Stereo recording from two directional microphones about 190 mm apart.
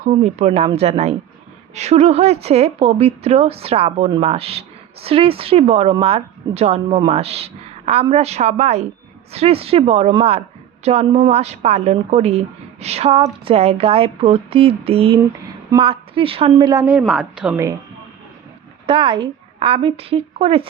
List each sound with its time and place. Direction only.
0.0 s a woman's voice: 35° right (ahead or behind)
16.8 s a woman's voice: 5° right (ahead or behind)
18.9 s a woman's voice: 25° right (ahead or behind)